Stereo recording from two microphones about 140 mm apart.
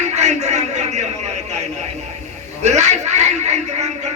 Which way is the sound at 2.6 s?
55° right (ahead or behind).